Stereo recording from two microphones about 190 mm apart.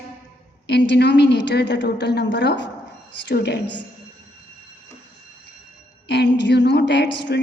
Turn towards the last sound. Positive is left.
turn(degrees=65)  # may be behind; listen again after turning